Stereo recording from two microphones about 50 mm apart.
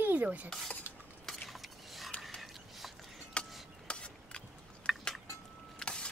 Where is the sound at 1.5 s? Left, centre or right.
Centre.